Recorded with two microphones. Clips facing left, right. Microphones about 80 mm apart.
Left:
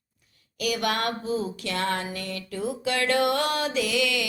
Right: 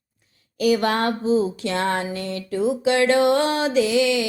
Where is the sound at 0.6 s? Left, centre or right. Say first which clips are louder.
Right 7 dB; right.